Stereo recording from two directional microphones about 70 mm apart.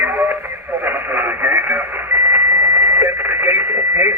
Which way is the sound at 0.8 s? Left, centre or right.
Right.